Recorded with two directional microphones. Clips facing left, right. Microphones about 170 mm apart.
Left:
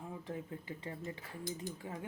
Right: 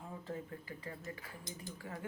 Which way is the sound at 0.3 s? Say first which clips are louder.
Even; 20° left (ahead or behind).